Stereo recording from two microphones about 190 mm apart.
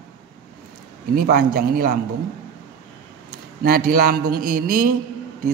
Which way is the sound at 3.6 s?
50° right (ahead or behind).